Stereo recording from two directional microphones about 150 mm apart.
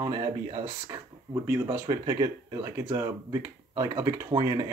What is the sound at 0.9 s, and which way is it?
Speech, 15° right (ahead or behind).